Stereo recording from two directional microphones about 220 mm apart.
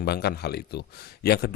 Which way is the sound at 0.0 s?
45° left (ahead or behind).